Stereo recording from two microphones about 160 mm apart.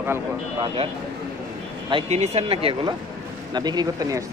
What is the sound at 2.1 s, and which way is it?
Speech, 45° right (ahead or behind).